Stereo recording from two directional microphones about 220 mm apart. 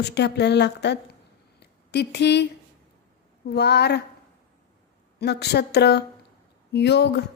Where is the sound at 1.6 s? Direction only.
50° left (ahead or behind).